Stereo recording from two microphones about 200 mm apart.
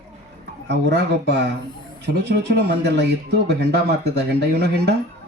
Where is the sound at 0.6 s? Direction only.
55° right (ahead or behind).